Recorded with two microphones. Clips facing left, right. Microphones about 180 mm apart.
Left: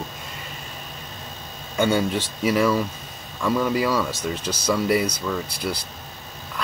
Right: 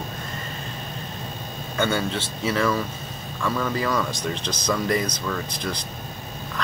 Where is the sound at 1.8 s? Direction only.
10° left (ahead or behind).